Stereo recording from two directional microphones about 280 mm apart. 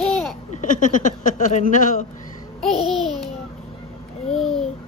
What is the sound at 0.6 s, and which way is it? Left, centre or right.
A woman's voice, left.